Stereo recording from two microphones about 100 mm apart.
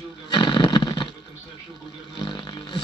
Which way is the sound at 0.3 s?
50° left (ahead or behind).